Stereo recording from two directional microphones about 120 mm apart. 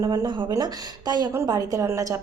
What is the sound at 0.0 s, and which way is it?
A woman's voice, 30° right (ahead or behind).